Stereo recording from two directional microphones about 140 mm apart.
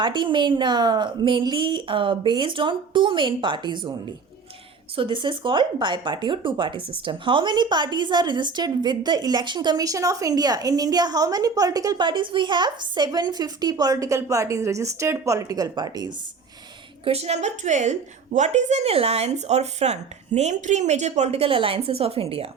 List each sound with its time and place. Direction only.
0.0 s a woman's voice: 35° right (ahead or behind)
4.9 s a woman's voice: 35° right (ahead or behind)
17.0 s a woman's voice: 45° right (ahead or behind)